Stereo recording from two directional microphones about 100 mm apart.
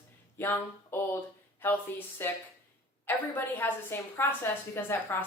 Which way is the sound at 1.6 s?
20° left (ahead or behind).